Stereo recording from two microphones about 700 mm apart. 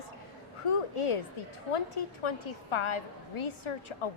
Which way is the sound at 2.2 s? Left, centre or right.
Left.